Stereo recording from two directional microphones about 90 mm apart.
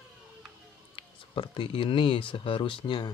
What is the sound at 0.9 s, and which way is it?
Speech, 75° left (ahead or behind).